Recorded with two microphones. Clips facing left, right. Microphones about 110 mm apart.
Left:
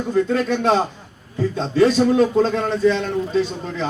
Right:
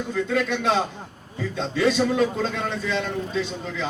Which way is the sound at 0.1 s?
40° left (ahead or behind).